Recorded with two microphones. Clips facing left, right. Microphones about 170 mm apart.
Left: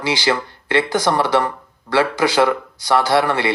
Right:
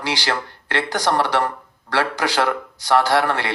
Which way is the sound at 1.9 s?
15° left (ahead or behind).